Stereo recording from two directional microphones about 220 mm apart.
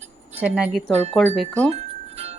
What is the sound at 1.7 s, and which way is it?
Music, 30° right (ahead or behind).